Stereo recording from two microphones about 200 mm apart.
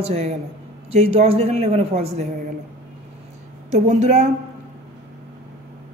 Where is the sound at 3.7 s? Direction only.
35° right (ahead or behind).